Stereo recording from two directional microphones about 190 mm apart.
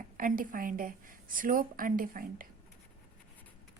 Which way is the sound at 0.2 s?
45° right (ahead or behind).